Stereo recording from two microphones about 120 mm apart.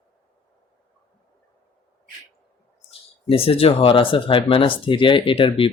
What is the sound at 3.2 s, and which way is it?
Speech, 50° left (ahead or behind).